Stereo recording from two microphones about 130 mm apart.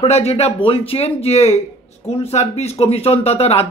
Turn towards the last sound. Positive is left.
turn(degrees=50)  # may be behind; listen again after turning